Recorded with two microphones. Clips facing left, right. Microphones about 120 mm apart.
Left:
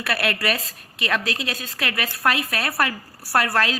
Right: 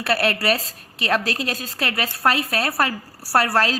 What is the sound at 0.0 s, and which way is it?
A woman's voice, 30° right (ahead or behind).